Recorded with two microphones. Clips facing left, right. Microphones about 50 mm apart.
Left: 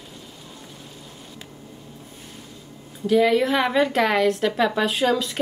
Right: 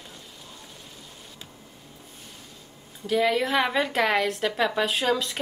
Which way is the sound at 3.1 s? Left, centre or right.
Centre.